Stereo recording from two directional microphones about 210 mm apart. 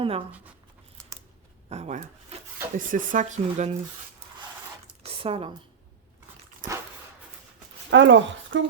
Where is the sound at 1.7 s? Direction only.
30° right (ahead or behind).